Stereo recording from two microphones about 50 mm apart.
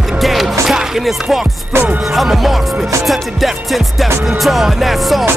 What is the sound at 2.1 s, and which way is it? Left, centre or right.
Speech, centre.